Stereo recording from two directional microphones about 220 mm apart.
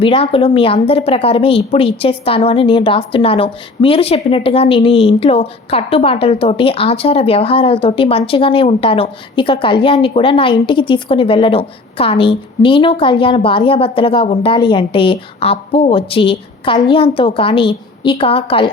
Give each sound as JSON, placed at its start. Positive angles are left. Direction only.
{"t": 0.0, "sound": "a woman's voice", "side_deg": 25}